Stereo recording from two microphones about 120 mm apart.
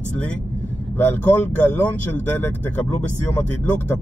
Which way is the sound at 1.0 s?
15° left (ahead or behind).